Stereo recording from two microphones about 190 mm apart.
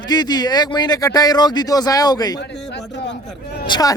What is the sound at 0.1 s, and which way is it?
Speech, 20° left (ahead or behind).